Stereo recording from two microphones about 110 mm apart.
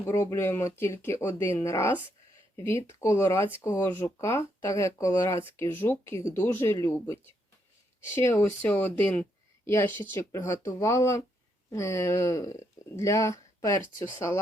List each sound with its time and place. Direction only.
0.0 s speech: 25° left (ahead or behind)
10.3 s speech: 30° left (ahead or behind)